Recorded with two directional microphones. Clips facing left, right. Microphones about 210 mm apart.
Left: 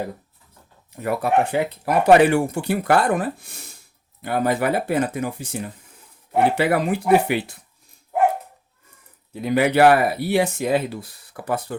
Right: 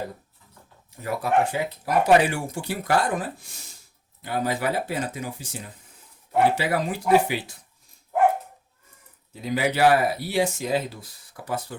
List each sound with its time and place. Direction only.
0.9 s speech: 60° left (ahead or behind)
9.3 s speech: 60° left (ahead or behind)